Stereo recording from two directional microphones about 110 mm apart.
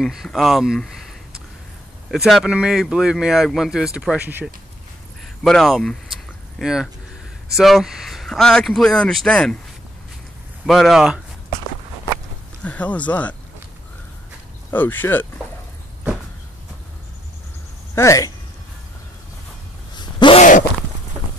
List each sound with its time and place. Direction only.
0.0 s speech: centre (ahead or behind); by 4.5 s 15° right (ahead or behind)
5.4 s speech: centre (ahead or behind)
10.7 s speech: centre (ahead or behind)
12.6 s speech: 10° left (ahead or behind)
14.7 s speech: 20° left (ahead or behind)
17.9 s speech: 30° left (ahead or behind)
20.0 s a sound: 45° left (ahead or behind)